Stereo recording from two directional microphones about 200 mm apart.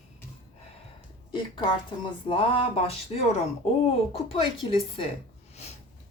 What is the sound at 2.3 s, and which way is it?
Speech, 25° left (ahead or behind).